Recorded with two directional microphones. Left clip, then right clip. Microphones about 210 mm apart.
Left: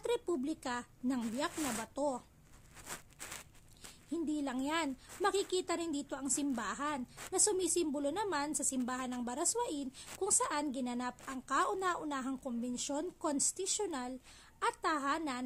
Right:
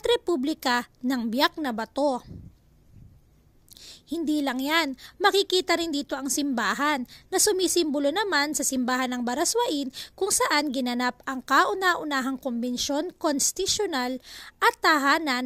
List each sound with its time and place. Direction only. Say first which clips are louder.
0.0 s a woman's voice: right 12 dB; 30° right (ahead or behind)
4.1 s a woman's voice: right 11 dB; 35° right (ahead or behind)